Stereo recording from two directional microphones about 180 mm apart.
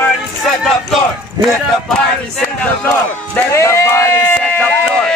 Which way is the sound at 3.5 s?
15° left (ahead or behind).